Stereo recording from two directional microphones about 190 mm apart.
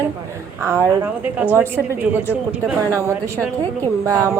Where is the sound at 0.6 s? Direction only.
15° right (ahead or behind).